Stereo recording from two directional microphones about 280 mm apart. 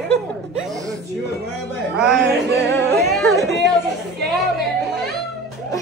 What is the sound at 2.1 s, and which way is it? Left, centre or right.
Music, right.